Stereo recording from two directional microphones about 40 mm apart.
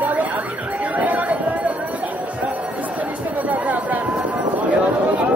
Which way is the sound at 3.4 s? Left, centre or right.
Right.